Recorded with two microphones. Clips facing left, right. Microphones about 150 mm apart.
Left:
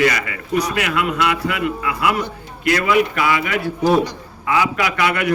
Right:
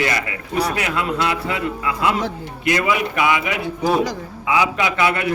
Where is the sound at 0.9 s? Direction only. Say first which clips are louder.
Left 2 dB; 30° right (ahead or behind).